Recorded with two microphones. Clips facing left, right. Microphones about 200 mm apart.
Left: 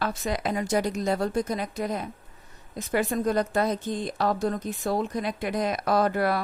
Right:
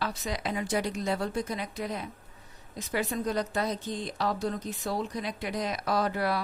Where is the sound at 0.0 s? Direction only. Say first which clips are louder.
Left 5 dB; 55° left (ahead or behind).